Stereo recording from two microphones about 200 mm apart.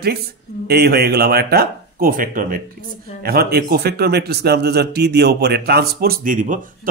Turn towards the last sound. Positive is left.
turn(degrees=-40)  # may be behind; listen again after turning